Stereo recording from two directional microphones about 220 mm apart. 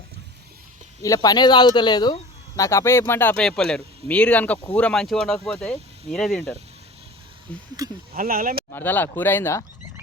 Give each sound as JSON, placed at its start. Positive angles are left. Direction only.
{"t": 1.0, "sound": "speech", "side_deg": 15}
{"t": 8.1, "sound": "speech", "side_deg": -40}
{"t": 8.7, "sound": "speech", "side_deg": 10}